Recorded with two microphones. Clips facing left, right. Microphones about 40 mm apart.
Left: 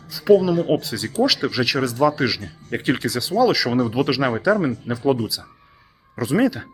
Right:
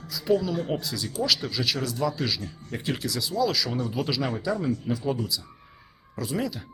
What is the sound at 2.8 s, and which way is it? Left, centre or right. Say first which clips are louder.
Speech: left 7 dB; left.